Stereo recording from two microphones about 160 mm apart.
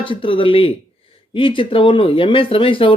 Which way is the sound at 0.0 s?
30° left (ahead or behind).